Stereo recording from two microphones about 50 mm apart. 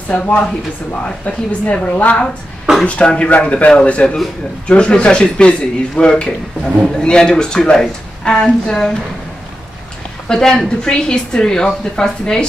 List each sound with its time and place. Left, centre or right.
0.1 s speech: left
10.2 s a woman's voice: centre